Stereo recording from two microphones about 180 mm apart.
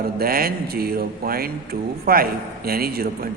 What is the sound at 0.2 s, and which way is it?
A man's voice, 55° right (ahead or behind).